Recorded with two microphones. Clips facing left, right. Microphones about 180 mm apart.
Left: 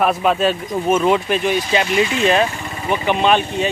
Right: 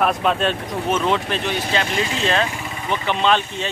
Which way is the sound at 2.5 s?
5° right (ahead or behind).